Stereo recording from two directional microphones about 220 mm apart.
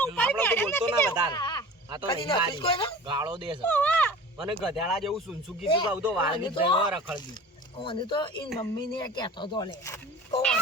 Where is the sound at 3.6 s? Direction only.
5° left (ahead or behind).